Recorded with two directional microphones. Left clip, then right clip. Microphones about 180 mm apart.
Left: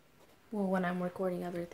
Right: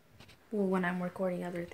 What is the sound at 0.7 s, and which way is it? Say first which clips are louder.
Speech: even; 10° left (ahead or behind).